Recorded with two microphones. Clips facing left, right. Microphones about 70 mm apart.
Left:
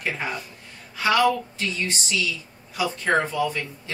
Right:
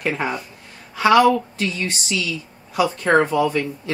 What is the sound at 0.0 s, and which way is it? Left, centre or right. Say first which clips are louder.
Speech: right 5 dB; right.